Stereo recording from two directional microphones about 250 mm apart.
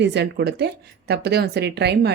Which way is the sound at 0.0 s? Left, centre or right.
Right.